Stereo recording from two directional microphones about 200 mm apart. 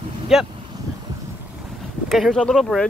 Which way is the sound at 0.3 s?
Centre (ahead or behind).